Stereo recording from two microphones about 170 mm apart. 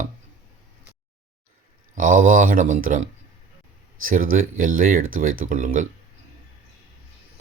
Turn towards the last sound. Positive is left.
turn(degrees=-50)  # may be behind; listen again after turning